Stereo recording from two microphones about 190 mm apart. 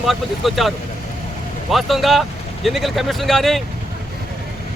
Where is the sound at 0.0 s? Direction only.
Centre (ahead or behind).